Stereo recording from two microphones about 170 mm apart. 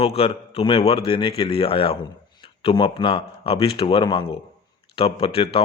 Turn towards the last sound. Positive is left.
turn(degrees=35)  # may be behind; listen again after turning